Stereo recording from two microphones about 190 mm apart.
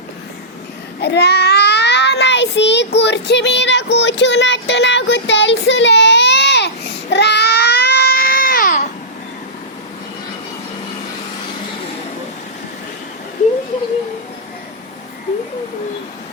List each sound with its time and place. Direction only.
1.0 s child singing: 60° left (ahead or behind)
7.1 s baby cry: 60° left (ahead or behind); by 8.9 s 45° left (ahead or behind)